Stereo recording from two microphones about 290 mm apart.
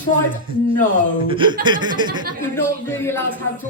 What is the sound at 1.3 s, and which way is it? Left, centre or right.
Speech, centre.